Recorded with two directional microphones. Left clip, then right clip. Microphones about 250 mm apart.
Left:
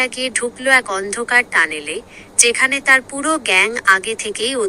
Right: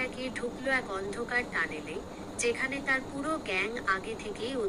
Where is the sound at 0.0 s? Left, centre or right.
Left.